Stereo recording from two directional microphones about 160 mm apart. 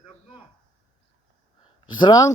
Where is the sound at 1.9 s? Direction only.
30° left (ahead or behind).